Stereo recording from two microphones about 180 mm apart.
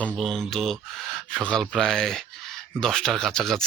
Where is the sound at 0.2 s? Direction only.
Centre (ahead or behind).